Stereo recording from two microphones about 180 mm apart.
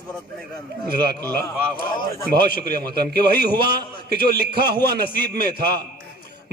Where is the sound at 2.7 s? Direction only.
60° right (ahead or behind).